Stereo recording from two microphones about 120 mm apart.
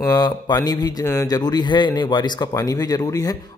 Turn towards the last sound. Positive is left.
turn(degrees=30)  # may be behind; listen again after turning